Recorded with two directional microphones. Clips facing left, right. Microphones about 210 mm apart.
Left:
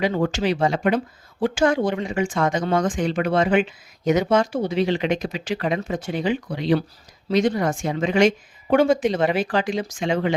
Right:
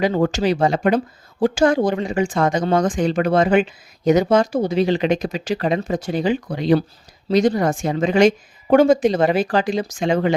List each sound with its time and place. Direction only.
0.0 s speech: 40° right (ahead or behind)